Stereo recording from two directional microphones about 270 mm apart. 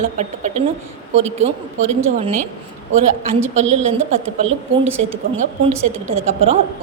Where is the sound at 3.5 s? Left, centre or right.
Right.